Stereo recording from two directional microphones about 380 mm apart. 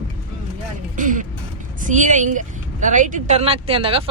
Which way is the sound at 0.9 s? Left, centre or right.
Centre.